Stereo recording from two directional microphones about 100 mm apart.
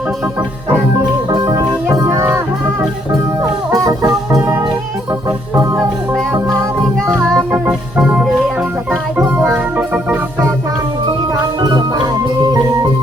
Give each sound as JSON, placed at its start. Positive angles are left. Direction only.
{"t": 1.3, "sound": "music", "side_deg": -45}
{"t": 3.8, "sound": "music", "side_deg": -35}
{"t": 5.5, "sound": "organ", "side_deg": -35}
{"t": 7.3, "sound": "music", "side_deg": -25}
{"t": 7.7, "sound": "music", "side_deg": -10}
{"t": 9.7, "sound": "organ", "side_deg": -15}
{"t": 11.6, "sound": "music", "side_deg": -45}